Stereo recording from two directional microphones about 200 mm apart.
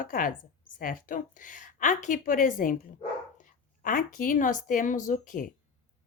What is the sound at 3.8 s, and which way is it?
Speech, 40° left (ahead or behind).